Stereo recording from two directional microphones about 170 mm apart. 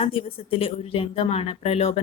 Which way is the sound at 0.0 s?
35° left (ahead or behind).